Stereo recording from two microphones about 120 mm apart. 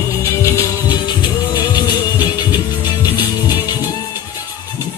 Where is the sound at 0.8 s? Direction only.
40° left (ahead or behind).